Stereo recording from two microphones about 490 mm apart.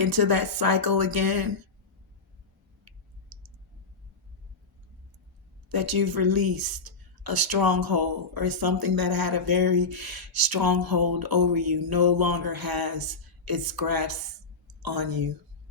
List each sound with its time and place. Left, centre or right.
0.0 s speech: right
5.6 s speech: right